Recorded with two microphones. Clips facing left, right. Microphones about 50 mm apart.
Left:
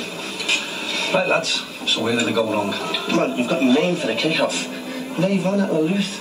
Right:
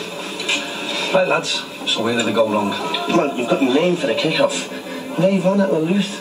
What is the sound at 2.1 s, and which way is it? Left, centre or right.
Speech, right.